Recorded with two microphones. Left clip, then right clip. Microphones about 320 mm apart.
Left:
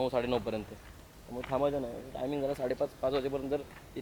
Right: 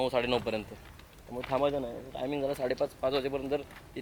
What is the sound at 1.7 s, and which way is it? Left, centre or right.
A man's voice, left.